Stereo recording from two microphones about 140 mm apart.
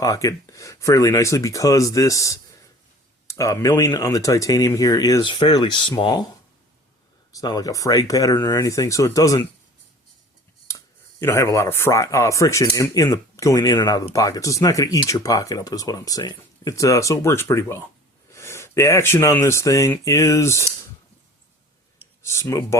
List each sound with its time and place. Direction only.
0.0 s speech: 25° left (ahead or behind)
7.3 s speech: 25° left (ahead or behind)
10.7 s speech: 20° left (ahead or behind)
22.2 s speech: 20° left (ahead or behind)